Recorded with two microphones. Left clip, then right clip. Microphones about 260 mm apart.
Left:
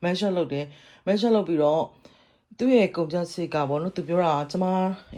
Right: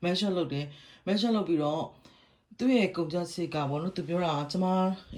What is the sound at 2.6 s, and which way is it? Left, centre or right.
Speech, centre.